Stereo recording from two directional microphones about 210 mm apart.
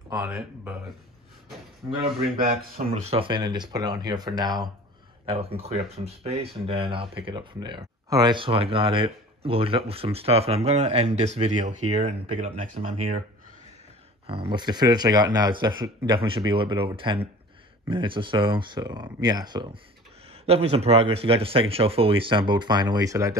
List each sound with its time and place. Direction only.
0.1 s speech: 15° right (ahead or behind)
1.8 s speech: 15° right (ahead or behind)
2.9 s speech: 30° right (ahead or behind)
14.2 s speech: 25° right (ahead or behind)